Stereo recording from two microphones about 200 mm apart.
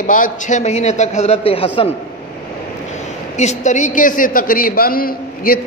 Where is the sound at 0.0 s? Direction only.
40° left (ahead or behind).